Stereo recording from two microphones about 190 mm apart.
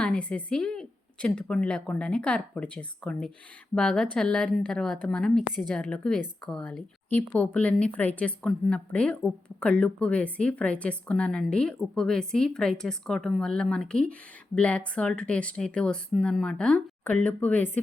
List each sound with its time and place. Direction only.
0.0 s speech: 5° left (ahead or behind)